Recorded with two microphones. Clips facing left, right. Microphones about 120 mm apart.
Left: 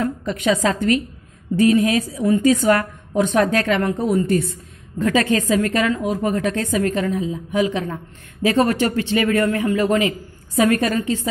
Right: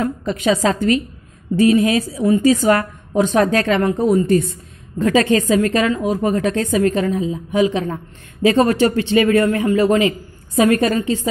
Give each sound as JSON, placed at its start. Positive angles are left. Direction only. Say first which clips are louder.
{"t": 0.0, "sound": "a woman's voice", "louder": "right 2 dB", "side_deg": -20}
{"t": 8.5, "sound": "speech", "louder": "right 3 dB", "side_deg": -35}
{"t": 8.7, "sound": "a woman's voice", "louder": "right 4 dB", "side_deg": -20}